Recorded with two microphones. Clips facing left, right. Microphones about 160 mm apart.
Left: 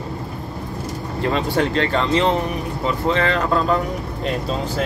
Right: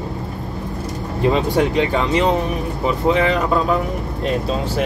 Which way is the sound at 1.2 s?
15° right (ahead or behind).